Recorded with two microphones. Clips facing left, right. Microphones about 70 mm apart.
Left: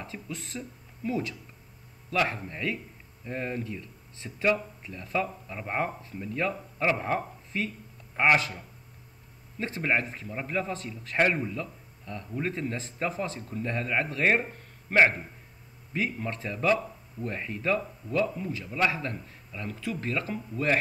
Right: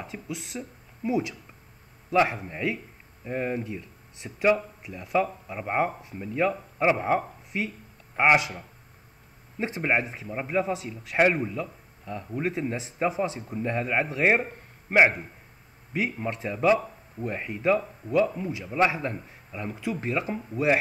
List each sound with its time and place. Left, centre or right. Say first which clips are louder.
0.0 s a man's voice: right 3 dB; centre